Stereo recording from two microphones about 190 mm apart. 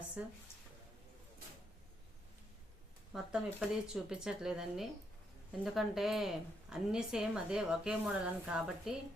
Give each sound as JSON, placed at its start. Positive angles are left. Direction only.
{"t": 0.2, "sound": "speech", "side_deg": -5}
{"t": 3.1, "sound": "a woman's voice", "side_deg": 0}